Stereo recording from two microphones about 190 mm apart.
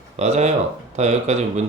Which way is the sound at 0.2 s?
35° right (ahead or behind).